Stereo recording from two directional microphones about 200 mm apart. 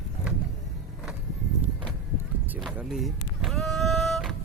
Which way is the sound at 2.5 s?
5° right (ahead or behind).